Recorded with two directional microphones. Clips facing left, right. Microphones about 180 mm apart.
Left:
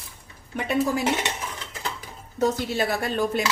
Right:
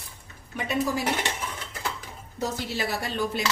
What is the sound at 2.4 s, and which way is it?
Speech, 50° left (ahead or behind).